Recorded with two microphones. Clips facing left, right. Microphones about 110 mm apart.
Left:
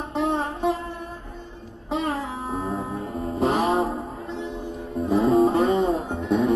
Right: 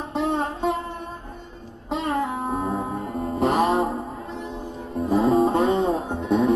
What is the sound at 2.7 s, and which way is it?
Music, 30° right (ahead or behind).